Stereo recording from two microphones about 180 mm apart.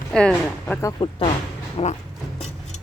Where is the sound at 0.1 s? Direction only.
5° left (ahead or behind).